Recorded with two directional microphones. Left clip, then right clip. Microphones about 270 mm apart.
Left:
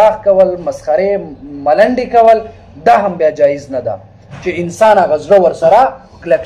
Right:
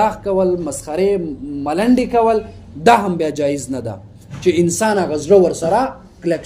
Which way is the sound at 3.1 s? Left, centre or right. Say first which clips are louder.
Left 8 dB; right.